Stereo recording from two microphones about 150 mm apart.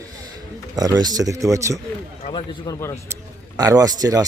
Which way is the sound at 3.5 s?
25° right (ahead or behind).